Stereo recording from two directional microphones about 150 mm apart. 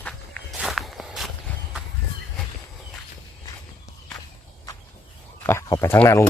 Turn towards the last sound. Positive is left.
turn(degrees=20)  # may be behind; listen again after turning